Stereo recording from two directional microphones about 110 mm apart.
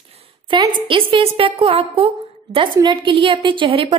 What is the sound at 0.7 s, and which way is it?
A woman's voice, 50° right (ahead or behind).